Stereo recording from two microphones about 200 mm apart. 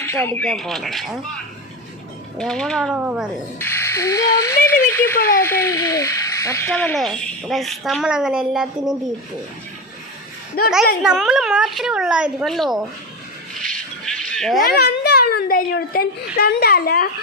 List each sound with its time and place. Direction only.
0.0 s speech: 10° left (ahead or behind)
2.4 s speech: 5° left (ahead or behind)
3.6 s speech: 10° left (ahead or behind)
10.7 s speech: 5° right (ahead or behind)
13.5 s a sound: centre (ahead or behind)
14.7 s a child's voice: 50° left (ahead or behind)